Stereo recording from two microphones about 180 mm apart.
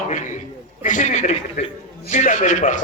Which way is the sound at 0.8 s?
45° left (ahead or behind).